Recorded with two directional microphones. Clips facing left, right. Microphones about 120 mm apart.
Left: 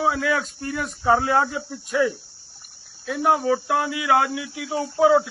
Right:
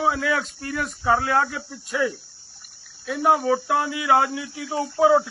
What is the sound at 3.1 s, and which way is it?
Speech, 10° right (ahead or behind).